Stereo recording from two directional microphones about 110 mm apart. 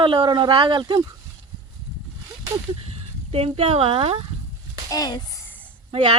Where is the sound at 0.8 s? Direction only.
35° right (ahead or behind).